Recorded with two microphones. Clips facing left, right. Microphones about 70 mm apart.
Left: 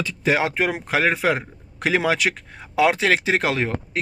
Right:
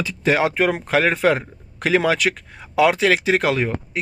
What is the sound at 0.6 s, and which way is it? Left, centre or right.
Speech, centre.